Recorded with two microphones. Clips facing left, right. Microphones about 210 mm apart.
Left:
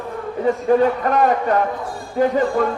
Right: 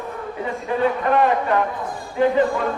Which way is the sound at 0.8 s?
40° left (ahead or behind).